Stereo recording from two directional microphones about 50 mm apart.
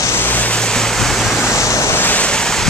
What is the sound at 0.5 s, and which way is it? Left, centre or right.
Waves, centre.